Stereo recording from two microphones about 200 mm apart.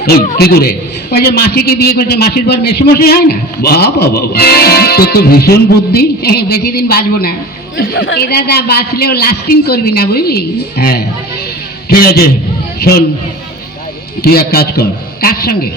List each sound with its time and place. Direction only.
0.0 s a woman's voice: 50° left (ahead or behind)
14.2 s a woman's voice: 50° left (ahead or behind)